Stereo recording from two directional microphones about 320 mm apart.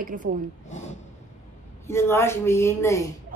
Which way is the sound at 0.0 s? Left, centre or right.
Right.